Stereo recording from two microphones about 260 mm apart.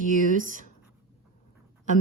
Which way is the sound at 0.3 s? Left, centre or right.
Right.